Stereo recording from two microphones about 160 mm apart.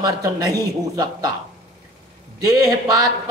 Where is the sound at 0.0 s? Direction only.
20° right (ahead or behind).